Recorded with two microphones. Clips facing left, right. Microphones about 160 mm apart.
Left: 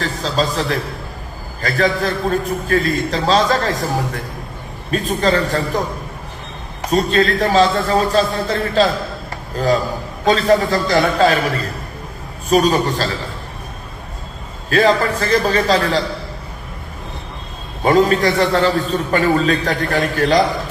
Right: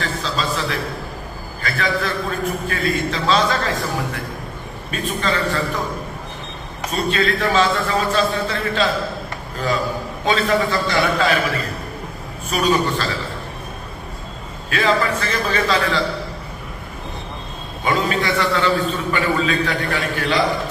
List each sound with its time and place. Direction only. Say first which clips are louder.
0.0 s a sound: left 4 dB; 40° left (ahead or behind)
1.6 s a man's voice: left 5 dB; 40° left (ahead or behind)
6.9 s a man's voice: left 5 dB; 40° left (ahead or behind)
14.7 s a man's voice: left 4 dB; 40° left (ahead or behind)
17.8 s a man's voice: left 7 dB; 40° left (ahead or behind)